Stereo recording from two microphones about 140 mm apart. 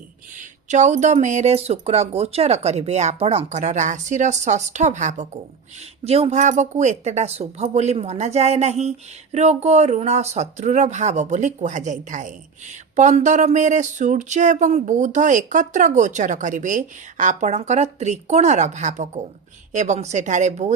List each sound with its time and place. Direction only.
0.3 s speech: 60° right (ahead or behind)